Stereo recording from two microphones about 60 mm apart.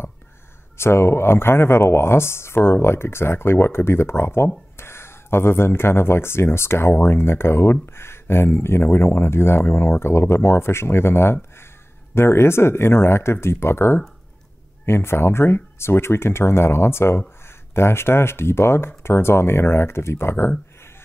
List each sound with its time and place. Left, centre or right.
0.7 s speech: left